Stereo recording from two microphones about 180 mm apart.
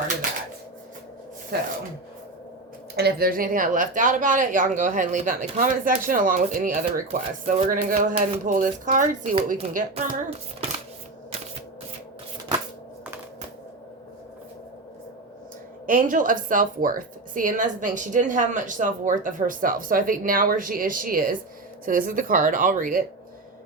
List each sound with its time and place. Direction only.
2.9 s speech: 60° right (ahead or behind); by 10.7 s 35° right (ahead or behind)
15.9 s speech: 50° right (ahead or behind)